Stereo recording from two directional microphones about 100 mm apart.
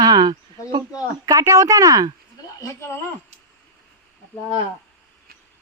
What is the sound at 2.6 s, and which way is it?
Speech, 30° left (ahead or behind).